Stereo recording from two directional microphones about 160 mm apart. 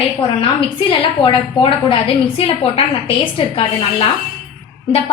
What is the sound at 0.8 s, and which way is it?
A woman's voice, 30° left (ahead or behind).